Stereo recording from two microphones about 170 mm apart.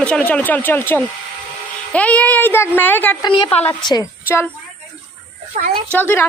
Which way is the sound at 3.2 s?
35° left (ahead or behind).